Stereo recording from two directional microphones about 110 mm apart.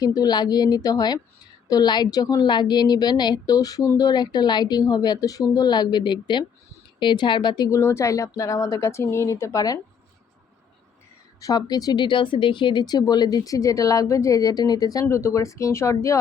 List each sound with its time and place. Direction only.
0.0 s a woman's voice: 35° left (ahead or behind)
11.3 s a woman's voice: 35° left (ahead or behind)